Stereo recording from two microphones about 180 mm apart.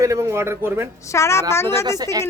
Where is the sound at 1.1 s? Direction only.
15° left (ahead or behind).